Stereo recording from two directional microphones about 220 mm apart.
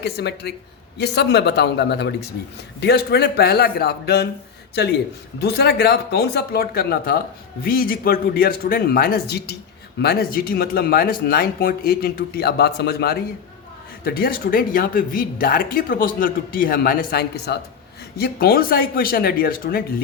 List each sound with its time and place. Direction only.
0.0 s speech: 50° left (ahead or behind)
5.4 s speech: 45° left (ahead or behind)